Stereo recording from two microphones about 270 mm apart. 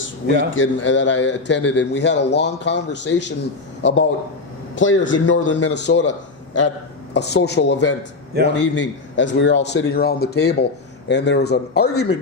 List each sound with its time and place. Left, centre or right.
0.5 s a man's voice: left
4.7 s a man's voice: left
8.3 s a man's voice: right
8.7 s a man's voice: left